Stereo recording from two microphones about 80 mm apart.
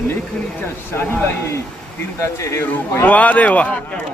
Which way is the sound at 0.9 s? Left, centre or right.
Left.